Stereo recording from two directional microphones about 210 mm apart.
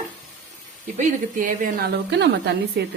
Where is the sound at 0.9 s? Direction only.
40° right (ahead or behind); by 2.3 s 55° right (ahead or behind).